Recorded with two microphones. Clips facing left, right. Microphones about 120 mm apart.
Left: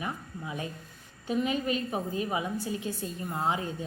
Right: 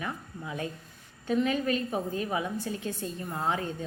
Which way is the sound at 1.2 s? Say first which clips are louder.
Right 2 dB; 5° left (ahead or behind).